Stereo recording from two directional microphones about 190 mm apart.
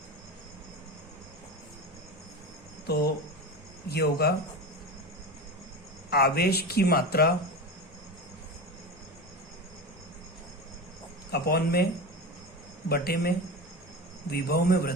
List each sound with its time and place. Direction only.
2.8 s speech: 55° left (ahead or behind)
6.1 s speech: 55° left (ahead or behind)
11.3 s speech: 55° left (ahead or behind)
12.9 s speech: 55° left (ahead or behind)